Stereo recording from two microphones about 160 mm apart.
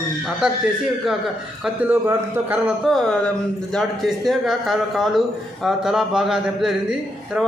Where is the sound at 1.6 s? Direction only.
10° right (ahead or behind).